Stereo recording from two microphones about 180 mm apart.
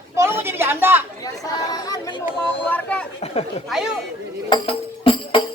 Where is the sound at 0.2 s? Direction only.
15° right (ahead or behind).